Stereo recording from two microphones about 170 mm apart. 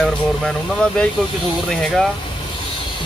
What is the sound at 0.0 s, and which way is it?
Speech, 5° left (ahead or behind).